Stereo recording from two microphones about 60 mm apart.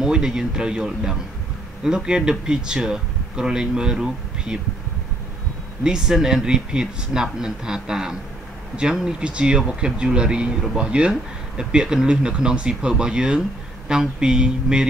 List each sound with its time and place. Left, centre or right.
0.0 s speech: centre
5.9 s speech: centre